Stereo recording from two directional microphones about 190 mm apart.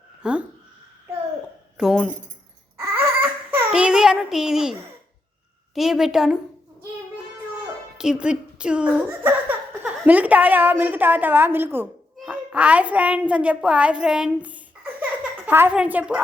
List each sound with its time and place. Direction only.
0.2 s speech: 5° right (ahead or behind)
1.8 s a woman's voice: centre (ahead or behind)
2.8 s a sound: 10° right (ahead or behind)
5.7 s a woman's voice: centre (ahead or behind)
7.9 s a woman's voice: 5° right (ahead or behind)